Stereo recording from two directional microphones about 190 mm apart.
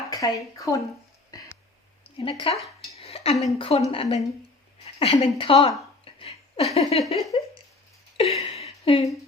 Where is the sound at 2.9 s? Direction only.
30° left (ahead or behind).